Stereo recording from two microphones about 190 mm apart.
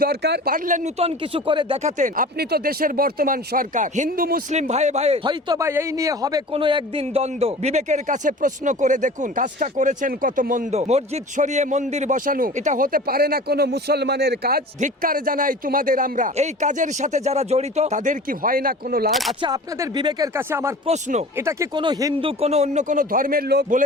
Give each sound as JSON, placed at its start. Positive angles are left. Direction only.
{"t": 0.0, "sound": "speech", "side_deg": -60}
{"t": 0.5, "sound": "a man's voice", "side_deg": -40}
{"t": 19.4, "sound": "speech", "side_deg": -20}
{"t": 20.8, "sound": "a man's voice", "side_deg": -35}
{"t": 21.3, "sound": "speech", "side_deg": -15}
{"t": 21.8, "sound": "a man's voice", "side_deg": -25}